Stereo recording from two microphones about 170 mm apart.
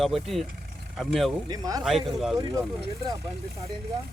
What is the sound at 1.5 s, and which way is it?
Speech, 20° right (ahead or behind).